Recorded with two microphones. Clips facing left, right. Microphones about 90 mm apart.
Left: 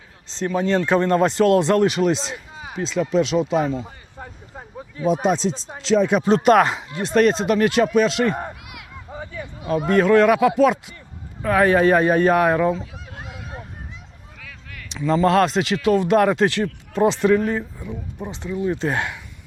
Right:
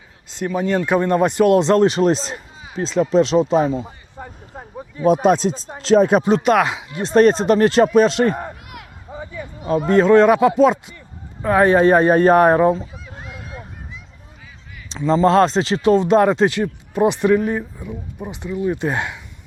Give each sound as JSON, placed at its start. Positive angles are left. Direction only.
{"t": 0.3, "sound": "speech", "side_deg": -10}
{"t": 4.2, "sound": "a sound", "side_deg": 0}
{"t": 4.5, "sound": "a sound", "side_deg": -15}
{"t": 5.2, "sound": "speech", "side_deg": -50}
{"t": 6.2, "sound": "speech", "side_deg": 0}
{"t": 6.9, "sound": "speech", "side_deg": -25}
{"t": 7.2, "sound": "a man's voice", "side_deg": -35}
{"t": 14.4, "sound": "a sound", "side_deg": 80}
{"t": 14.8, "sound": "speech", "side_deg": -30}